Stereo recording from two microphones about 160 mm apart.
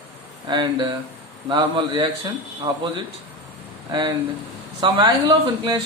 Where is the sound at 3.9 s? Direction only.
25° right (ahead or behind).